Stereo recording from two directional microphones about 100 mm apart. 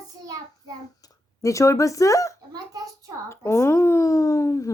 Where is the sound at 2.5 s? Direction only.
40° right (ahead or behind).